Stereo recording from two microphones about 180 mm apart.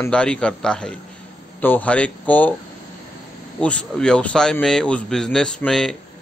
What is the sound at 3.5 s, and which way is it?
A man's voice, 5° left (ahead or behind).